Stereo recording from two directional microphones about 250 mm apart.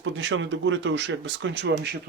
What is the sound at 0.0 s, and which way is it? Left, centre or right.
Speech, right.